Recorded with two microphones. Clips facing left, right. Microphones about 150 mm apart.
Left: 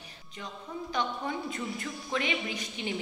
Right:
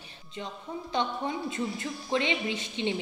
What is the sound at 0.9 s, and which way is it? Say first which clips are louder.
A woman's voice: right 3 dB; 25° right (ahead or behind).